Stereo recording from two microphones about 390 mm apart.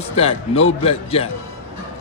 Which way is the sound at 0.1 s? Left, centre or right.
Centre.